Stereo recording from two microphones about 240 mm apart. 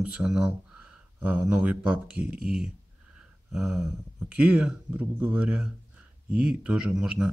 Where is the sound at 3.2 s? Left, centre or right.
Centre.